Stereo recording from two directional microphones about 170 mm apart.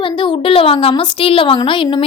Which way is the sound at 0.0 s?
30° left (ahead or behind).